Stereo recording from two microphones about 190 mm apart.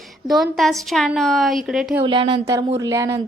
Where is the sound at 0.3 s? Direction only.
Centre (ahead or behind).